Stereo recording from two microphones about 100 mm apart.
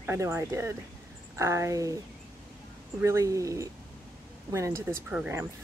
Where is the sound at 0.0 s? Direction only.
25° right (ahead or behind).